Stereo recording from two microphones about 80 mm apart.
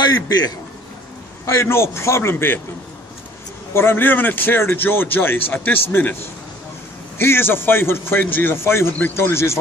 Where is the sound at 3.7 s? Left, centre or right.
Left.